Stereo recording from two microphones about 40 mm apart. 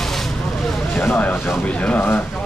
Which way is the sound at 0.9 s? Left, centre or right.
Left.